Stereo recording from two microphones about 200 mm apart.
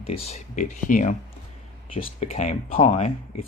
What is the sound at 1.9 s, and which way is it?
Speech, 25° left (ahead or behind).